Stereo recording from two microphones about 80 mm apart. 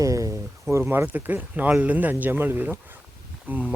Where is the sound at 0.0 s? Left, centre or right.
Right.